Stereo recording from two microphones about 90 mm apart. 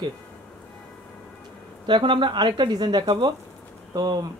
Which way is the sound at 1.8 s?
65° right (ahead or behind).